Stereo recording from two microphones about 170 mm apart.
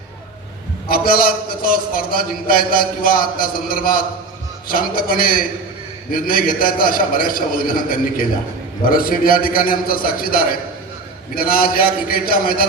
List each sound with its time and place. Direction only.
0.9 s a man's voice: 60° left (ahead or behind)